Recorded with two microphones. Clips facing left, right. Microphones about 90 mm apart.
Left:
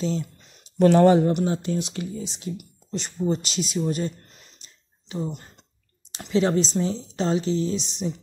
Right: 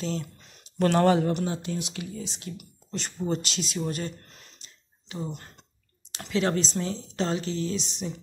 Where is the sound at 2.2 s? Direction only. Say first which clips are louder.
Left 5 dB; 20° left (ahead or behind).